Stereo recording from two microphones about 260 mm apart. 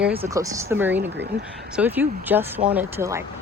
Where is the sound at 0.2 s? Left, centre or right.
Centre.